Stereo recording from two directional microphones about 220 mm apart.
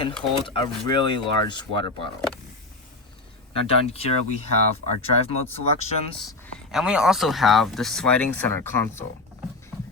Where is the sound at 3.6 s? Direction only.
25° left (ahead or behind).